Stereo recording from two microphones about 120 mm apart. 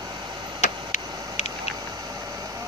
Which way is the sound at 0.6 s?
75° left (ahead or behind).